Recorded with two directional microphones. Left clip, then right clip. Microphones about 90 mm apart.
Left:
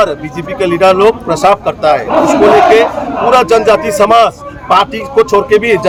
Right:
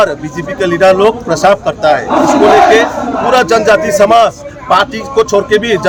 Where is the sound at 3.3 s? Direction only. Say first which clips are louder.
Even; 10° left (ahead or behind).